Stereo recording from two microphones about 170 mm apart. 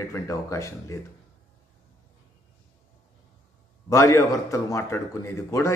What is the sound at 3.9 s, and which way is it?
A man's voice, 15° left (ahead or behind).